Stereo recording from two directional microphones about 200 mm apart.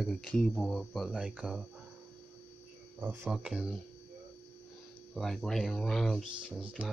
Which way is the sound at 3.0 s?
10° right (ahead or behind).